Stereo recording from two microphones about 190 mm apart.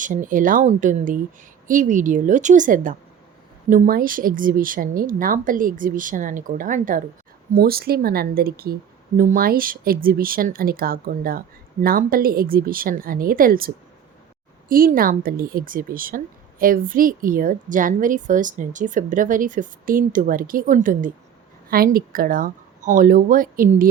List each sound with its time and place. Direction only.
0.0 s speech: 45° right (ahead or behind)